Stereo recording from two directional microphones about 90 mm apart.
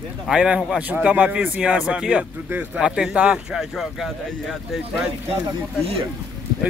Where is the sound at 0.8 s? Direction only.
15° right (ahead or behind); by 4.8 s centre (ahead or behind).